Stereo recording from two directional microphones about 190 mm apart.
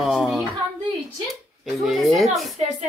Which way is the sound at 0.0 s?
Centre (ahead or behind).